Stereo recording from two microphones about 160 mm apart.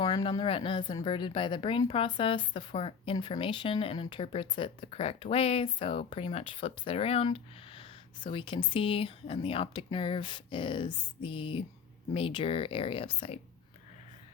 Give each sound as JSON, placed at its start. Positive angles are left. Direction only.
{"t": 0.0, "sound": "speech", "side_deg": 25}